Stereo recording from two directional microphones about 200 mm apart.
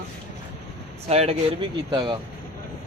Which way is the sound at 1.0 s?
30° right (ahead or behind).